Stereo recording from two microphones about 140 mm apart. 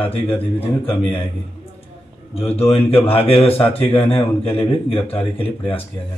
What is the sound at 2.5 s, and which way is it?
A man's voice, 45° left (ahead or behind).